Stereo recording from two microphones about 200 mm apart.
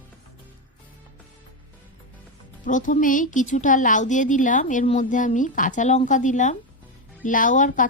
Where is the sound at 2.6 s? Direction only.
40° left (ahead or behind).